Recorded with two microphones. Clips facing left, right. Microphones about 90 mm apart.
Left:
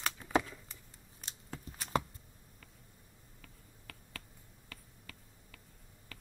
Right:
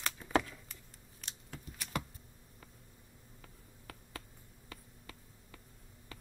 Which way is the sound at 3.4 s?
25° right (ahead or behind).